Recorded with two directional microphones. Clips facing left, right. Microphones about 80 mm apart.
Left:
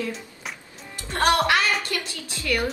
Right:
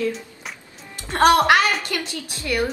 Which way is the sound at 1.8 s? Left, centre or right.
Right.